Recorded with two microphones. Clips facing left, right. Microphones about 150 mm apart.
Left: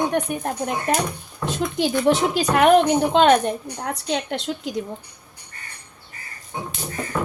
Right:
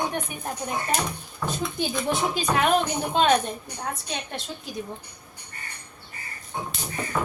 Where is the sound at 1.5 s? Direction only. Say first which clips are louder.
Left 6 dB; 80° left.